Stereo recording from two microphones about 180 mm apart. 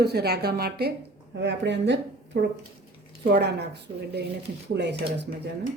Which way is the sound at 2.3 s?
60° right (ahead or behind).